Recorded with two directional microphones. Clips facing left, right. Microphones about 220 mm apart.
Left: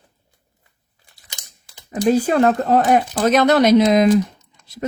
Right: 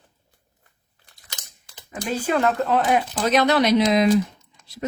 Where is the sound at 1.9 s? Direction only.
40° left (ahead or behind).